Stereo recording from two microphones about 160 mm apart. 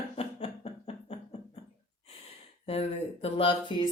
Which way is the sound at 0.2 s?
40° left (ahead or behind).